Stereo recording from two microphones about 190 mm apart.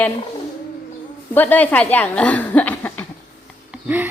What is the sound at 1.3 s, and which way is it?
Speech, 10° left (ahead or behind).